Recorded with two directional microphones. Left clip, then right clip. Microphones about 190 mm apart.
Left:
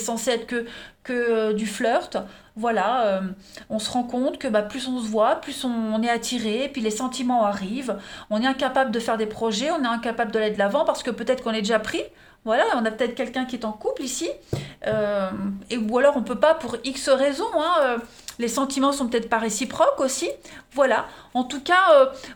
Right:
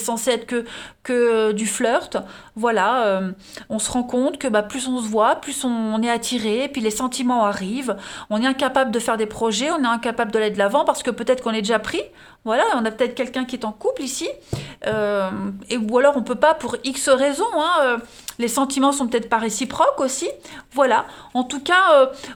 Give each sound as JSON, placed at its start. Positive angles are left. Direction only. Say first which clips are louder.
{"t": 0.0, "sound": "speech", "louder": "right 3 dB", "side_deg": -30}
{"t": 1.0, "sound": "speech", "louder": "right 5 dB", "side_deg": -50}